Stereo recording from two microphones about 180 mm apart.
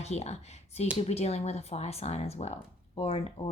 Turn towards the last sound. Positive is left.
turn(degrees=35)  # may be behind; listen again after turning